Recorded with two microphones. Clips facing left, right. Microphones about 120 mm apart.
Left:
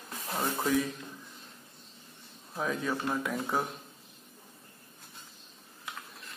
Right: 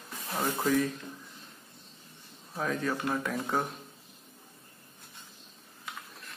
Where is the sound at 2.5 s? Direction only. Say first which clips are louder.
Right 1 dB; 5° left (ahead or behind).